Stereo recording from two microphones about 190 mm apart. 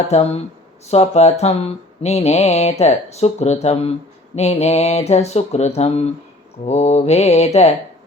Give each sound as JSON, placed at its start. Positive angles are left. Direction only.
{"t": 0.1, "sound": "speech", "side_deg": 35}